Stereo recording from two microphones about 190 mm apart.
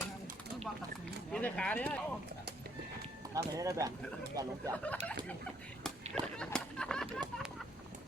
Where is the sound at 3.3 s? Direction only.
15° right (ahead or behind).